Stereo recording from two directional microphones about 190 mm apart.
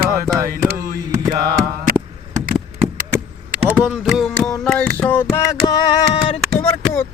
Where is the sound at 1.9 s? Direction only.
45° right (ahead or behind).